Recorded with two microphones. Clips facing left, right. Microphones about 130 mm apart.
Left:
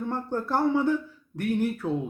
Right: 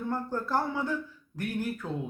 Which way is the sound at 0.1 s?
20° left (ahead or behind).